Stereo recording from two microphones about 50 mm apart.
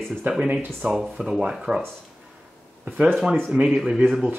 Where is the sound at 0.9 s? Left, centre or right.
Centre.